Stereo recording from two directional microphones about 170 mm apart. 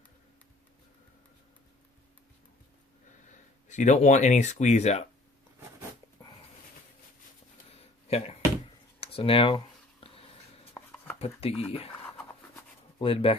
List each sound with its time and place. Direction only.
3.7 s speech: 45° left (ahead or behind)
8.0 s speech: 35° left (ahead or behind)
9.0 s a sound: 35° left (ahead or behind)
10.8 s a sound: 15° left (ahead or behind)
11.2 s speech: 35° left (ahead or behind)
13.0 s speech: 35° left (ahead or behind)